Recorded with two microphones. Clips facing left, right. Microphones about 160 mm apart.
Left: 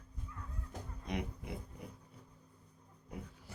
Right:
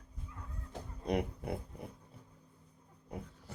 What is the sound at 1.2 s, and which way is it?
Pig, 50° right (ahead or behind).